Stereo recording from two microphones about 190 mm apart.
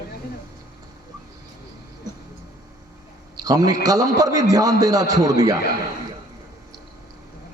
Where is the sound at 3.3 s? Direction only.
20° right (ahead or behind).